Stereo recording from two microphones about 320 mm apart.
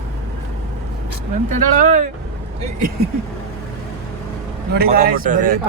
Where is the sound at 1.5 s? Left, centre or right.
Right.